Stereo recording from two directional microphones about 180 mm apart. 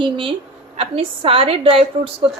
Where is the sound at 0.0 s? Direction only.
30° right (ahead or behind).